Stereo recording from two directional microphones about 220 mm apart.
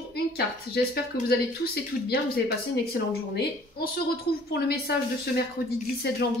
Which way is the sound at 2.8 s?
45° left (ahead or behind).